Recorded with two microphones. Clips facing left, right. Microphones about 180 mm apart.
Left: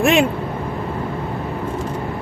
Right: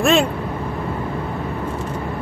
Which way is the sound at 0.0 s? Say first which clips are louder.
Left 1 dB; 20° left (ahead or behind).